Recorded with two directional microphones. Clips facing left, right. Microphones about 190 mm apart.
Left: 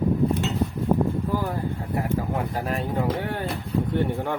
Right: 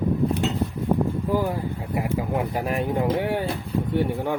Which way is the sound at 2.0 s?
15° right (ahead or behind).